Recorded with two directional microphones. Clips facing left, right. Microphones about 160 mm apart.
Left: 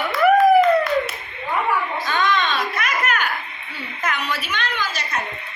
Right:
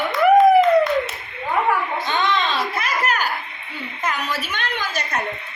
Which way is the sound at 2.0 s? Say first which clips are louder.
Left 2 dB; 25° right (ahead or behind).